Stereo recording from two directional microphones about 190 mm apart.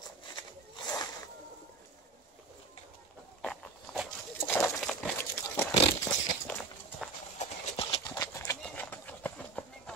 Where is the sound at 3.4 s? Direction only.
5° left (ahead or behind).